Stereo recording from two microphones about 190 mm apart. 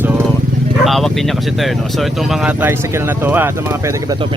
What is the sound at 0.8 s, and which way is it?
Speech, centre (ahead or behind).